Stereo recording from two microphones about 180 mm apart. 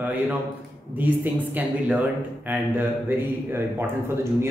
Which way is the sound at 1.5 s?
5° right (ahead or behind).